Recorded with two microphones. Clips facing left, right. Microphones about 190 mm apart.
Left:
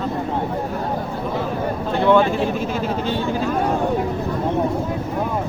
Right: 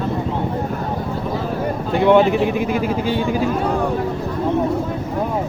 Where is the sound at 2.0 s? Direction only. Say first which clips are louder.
Right 3 dB; 20° right (ahead or behind).